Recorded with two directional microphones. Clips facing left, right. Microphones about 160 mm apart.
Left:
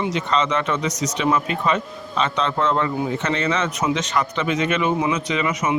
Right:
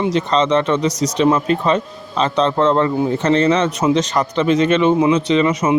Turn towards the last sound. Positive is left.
turn(degrees=-30)  # may be behind; listen again after turning